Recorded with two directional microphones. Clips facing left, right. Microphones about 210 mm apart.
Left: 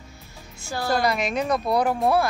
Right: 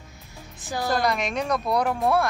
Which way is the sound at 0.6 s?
15° right (ahead or behind).